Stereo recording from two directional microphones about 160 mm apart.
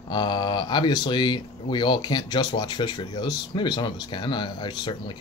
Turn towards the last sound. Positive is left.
turn(degrees=30)  # may be behind; listen again after turning